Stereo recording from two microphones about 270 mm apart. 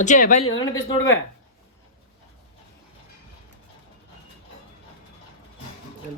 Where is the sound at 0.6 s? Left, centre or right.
Centre.